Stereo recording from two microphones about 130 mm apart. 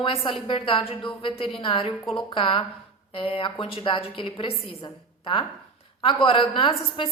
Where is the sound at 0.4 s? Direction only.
40° left (ahead or behind).